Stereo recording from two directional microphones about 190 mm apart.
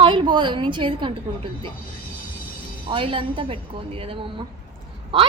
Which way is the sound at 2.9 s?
25° right (ahead or behind).